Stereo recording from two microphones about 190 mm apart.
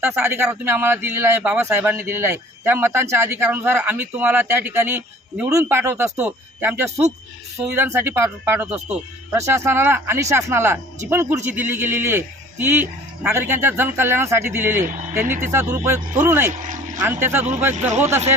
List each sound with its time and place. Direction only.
0.0 s speech: 10° right (ahead or behind)
16.6 s a sound: 40° right (ahead or behind)
17.0 s speech: 10° right (ahead or behind)
17.7 s speech: 35° right (ahead or behind)